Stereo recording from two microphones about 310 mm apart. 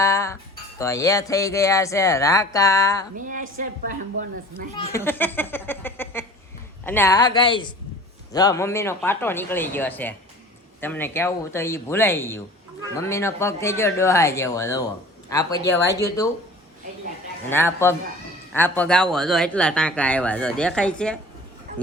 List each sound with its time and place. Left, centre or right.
0.0 s music: centre
0.8 s speech: centre
3.2 s a woman's voice: right
4.9 s speech: centre
17.5 s speech: centre